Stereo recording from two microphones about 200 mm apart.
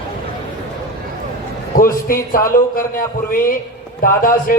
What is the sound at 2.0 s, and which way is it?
A man's voice, 45° left (ahead or behind).